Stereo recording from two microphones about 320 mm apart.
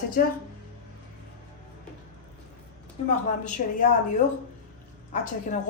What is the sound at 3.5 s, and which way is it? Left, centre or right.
Speech, left.